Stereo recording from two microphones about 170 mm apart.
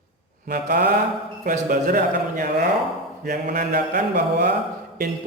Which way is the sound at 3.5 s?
60° right (ahead or behind).